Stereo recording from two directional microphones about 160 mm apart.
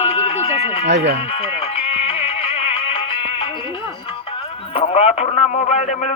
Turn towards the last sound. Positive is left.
turn(degrees=50)  # may be behind; listen again after turning